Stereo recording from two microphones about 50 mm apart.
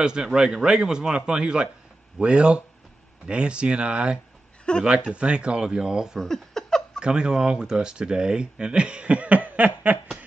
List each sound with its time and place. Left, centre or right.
0.0 s a man's voice: centre
6.1 s speech: centre
7.0 s speech: centre; by 9.9 s right